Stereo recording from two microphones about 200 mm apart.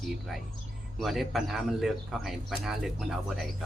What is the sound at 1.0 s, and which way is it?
A man's voice, centre (ahead or behind).